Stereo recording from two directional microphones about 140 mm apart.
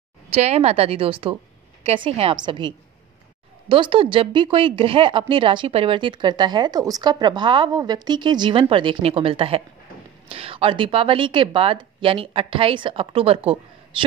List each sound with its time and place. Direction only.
0.3 s a woman's voice: 50° right (ahead or behind)